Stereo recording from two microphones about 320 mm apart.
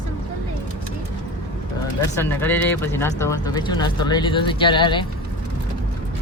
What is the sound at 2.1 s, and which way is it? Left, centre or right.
Speech, centre.